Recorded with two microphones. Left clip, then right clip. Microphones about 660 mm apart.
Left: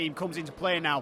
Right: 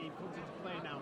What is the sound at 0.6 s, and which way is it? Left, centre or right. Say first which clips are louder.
Speech: left 18 dB; left.